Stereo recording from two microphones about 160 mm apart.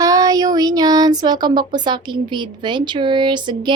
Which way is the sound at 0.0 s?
20° right (ahead or behind).